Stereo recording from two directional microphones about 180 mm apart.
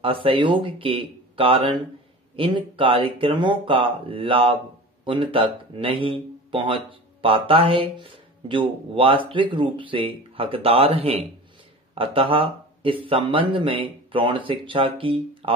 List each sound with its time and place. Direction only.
0.0 s speech: 30° right (ahead or behind)